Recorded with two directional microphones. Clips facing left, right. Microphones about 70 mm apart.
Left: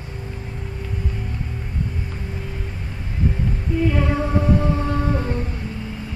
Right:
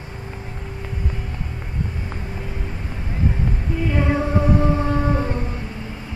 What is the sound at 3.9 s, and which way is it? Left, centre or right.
Music, centre.